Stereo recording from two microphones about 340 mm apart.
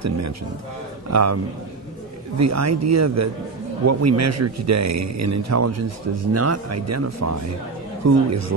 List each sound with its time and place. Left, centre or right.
1.1 s a man's voice: right